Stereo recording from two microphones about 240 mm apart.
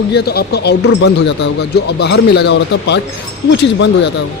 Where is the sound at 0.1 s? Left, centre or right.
Left.